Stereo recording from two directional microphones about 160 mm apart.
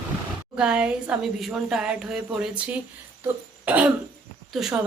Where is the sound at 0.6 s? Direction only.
5° right (ahead or behind).